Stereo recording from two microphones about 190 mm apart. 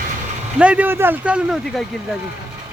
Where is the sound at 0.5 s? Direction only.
5° right (ahead or behind).